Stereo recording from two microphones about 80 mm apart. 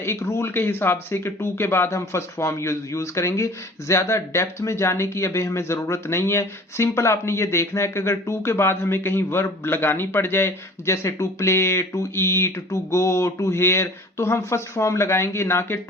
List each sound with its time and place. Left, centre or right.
0.0 s speech: left